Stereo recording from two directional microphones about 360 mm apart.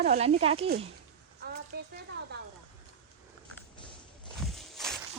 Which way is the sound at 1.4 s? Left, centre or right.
Right.